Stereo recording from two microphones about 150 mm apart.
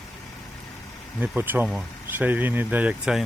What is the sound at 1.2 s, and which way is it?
Speech, 10° right (ahead or behind).